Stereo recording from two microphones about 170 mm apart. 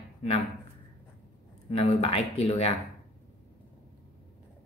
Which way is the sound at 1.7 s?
35° left (ahead or behind).